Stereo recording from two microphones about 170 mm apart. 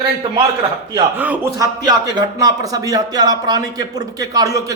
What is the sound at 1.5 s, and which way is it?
Speech, 20° right (ahead or behind).